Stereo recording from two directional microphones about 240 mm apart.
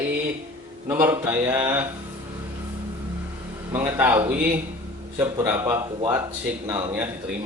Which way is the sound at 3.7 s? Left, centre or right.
Centre.